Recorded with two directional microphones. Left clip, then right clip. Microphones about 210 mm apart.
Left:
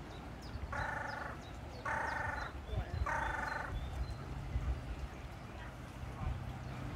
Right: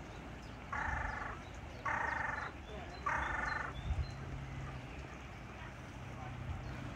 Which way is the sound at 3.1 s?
45° left (ahead or behind).